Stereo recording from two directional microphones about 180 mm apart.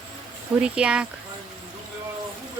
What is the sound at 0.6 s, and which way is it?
Speech, 5° right (ahead or behind).